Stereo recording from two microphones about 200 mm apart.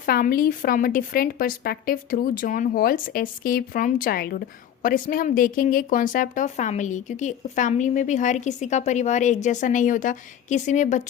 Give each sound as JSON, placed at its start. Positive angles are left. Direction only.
{"t": 0.0, "sound": "a woman's voice", "side_deg": 45}